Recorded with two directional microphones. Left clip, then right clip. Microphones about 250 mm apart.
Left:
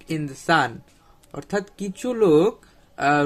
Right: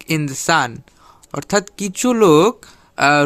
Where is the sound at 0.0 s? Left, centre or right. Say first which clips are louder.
Right 8 dB; right.